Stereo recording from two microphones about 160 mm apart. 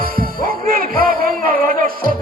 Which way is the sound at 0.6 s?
60° right (ahead or behind).